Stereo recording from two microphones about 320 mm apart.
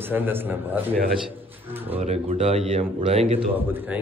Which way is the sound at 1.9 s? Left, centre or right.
Centre.